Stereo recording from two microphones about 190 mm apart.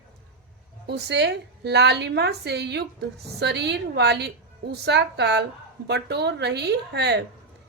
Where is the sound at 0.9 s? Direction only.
60° right (ahead or behind).